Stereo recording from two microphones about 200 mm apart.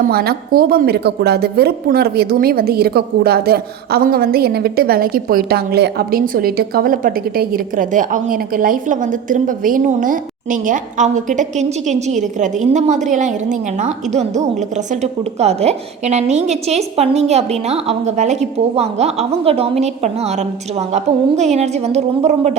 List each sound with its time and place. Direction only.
0.0 s a woman's voice: 50° right (ahead or behind); by 20.1 s 30° right (ahead or behind)
21.5 s a woman's voice: 35° right (ahead or behind)